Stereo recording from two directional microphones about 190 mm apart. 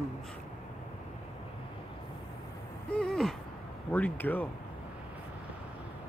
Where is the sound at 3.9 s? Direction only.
10° left (ahead or behind).